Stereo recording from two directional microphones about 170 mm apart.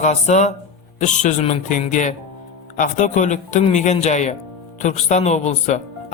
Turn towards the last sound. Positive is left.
turn(degrees=40)  # may be behind; listen again after turning